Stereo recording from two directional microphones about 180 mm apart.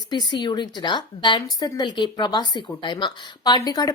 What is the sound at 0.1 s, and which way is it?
A woman's voice, 25° left (ahead or behind).